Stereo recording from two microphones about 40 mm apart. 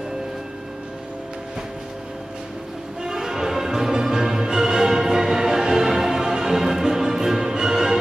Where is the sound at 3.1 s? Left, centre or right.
Centre.